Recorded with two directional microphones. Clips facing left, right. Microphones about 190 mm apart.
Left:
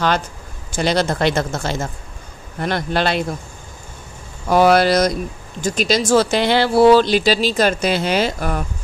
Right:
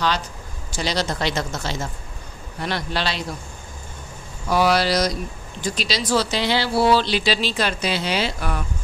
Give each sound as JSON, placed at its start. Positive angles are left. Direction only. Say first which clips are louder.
{"t": 0.7, "sound": "speech", "louder": "left 6 dB", "side_deg": 55}
{"t": 4.5, "sound": "speech", "louder": "left 6 dB", "side_deg": 50}